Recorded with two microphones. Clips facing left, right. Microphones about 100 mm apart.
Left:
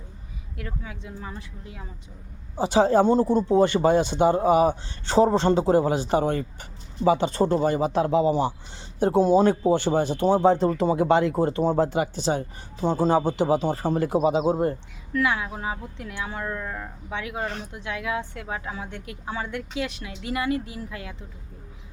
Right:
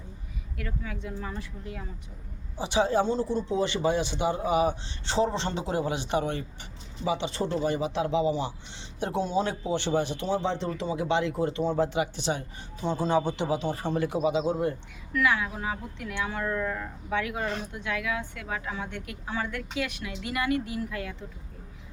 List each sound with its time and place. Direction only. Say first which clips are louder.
0.5 s speech: even; 25° left (ahead or behind)
2.6 s speech: left 6 dB; 45° left (ahead or behind); by 16.1 s 25° left (ahead or behind)
16.4 s speech: right 2 dB; 15° left (ahead or behind)